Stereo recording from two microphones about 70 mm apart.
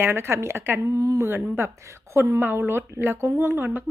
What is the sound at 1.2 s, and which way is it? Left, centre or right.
Speech, right.